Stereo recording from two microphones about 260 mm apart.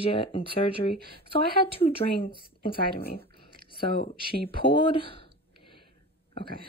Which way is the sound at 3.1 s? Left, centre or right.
Left.